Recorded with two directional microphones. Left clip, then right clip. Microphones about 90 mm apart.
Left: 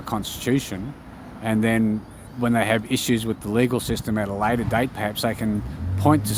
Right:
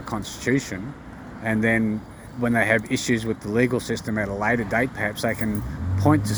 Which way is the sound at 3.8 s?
60° left (ahead or behind).